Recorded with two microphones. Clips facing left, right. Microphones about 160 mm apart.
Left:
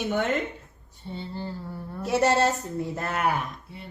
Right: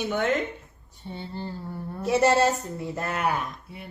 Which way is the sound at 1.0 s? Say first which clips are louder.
Left 1 dB; 15° right (ahead or behind).